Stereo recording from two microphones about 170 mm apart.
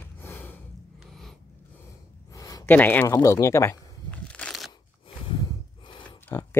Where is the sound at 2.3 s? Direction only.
20° left (ahead or behind).